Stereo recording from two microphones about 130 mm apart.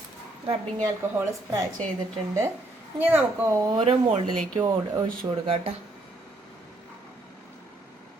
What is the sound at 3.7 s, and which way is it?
Speech, 45° right (ahead or behind).